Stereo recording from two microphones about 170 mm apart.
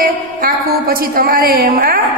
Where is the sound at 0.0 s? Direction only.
55° right (ahead or behind).